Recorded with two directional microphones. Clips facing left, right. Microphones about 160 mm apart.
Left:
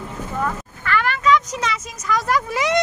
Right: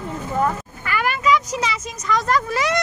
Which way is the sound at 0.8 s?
10° right (ahead or behind).